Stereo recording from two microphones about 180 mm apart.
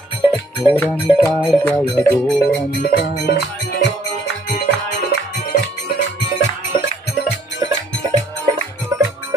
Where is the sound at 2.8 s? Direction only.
75° left (ahead or behind).